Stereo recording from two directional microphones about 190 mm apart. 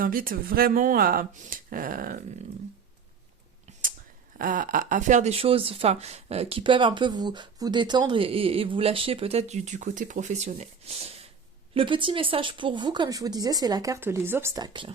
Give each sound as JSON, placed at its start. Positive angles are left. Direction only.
{"t": 0.0, "sound": "speech", "side_deg": -50}
{"t": 3.7, "sound": "whispering", "side_deg": -40}
{"t": 4.4, "sound": "speech", "side_deg": -45}